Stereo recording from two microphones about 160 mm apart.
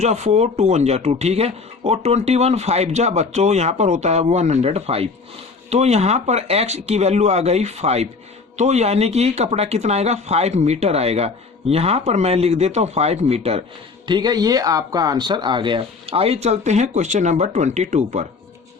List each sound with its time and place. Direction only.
0.0 s speech: 45° right (ahead or behind)
14.1 s speech: 25° right (ahead or behind); by 18.3 s 45° right (ahead or behind)